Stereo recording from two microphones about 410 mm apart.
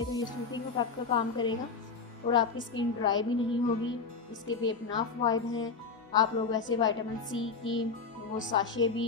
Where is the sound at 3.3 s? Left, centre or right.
Left.